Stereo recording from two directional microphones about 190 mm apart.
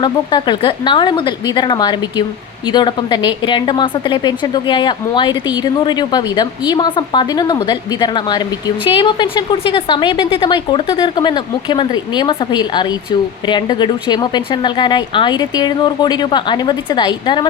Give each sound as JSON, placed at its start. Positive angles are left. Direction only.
{"t": 0.0, "sound": "a woman's voice", "side_deg": 25}